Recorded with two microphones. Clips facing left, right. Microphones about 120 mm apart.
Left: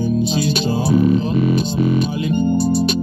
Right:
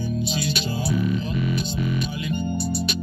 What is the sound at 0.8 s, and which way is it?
Speech, 35° left (ahead or behind).